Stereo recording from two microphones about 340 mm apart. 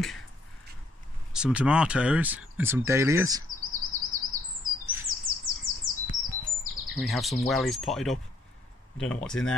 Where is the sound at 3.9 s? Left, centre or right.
Right.